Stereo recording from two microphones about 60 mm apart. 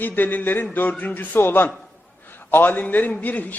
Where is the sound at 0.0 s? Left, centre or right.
Left.